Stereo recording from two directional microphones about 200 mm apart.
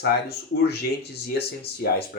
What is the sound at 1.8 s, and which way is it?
Speech, 50° left (ahead or behind).